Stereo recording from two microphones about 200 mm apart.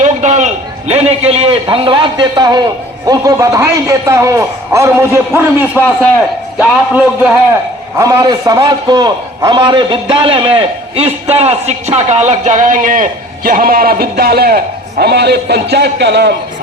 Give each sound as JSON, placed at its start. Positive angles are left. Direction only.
{"t": 0.0, "sound": "a man's voice", "side_deg": -35}
{"t": 7.9, "sound": "a man's voice", "side_deg": -15}